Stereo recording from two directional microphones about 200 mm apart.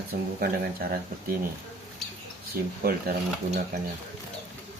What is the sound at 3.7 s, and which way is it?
Speech, 45° right (ahead or behind).